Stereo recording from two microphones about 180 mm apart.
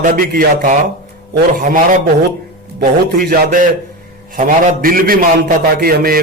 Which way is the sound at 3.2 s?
50° right (ahead or behind).